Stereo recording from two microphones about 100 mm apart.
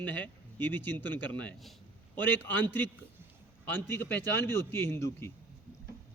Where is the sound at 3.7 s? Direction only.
20° left (ahead or behind).